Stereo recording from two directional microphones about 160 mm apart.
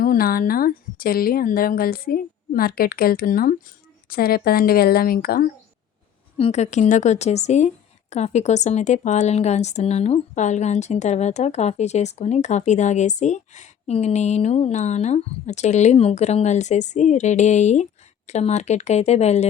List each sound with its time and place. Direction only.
0.0 s a woman's voice: 65° left (ahead or behind)
6.3 s a woman's voice: 40° left (ahead or behind)